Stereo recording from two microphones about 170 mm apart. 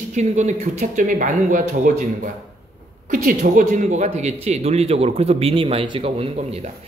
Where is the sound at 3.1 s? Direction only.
50° right (ahead or behind); by 6.6 s 35° right (ahead or behind).